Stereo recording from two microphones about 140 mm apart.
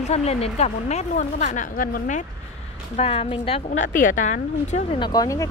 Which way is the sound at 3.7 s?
70° left (ahead or behind).